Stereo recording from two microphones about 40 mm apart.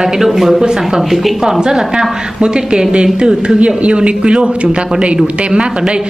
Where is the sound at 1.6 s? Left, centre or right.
Centre.